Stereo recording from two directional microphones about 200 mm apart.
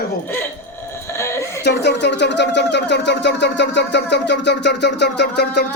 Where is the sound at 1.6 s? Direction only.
55° left (ahead or behind).